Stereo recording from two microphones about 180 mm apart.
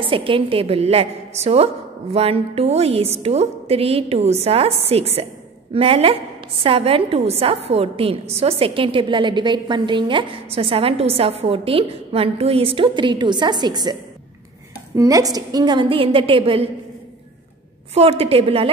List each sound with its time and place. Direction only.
0.0 s a woman's voice: 30° right (ahead or behind)
15.0 s a woman's voice: 20° right (ahead or behind)
17.9 s a woman's voice: 30° right (ahead or behind)